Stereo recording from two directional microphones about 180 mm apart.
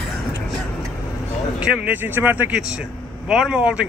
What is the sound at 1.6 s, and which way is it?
Speech, 5° right (ahead or behind).